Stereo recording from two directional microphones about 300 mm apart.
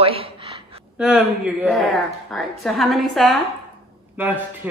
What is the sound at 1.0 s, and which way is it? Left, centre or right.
A woman's voice, centre.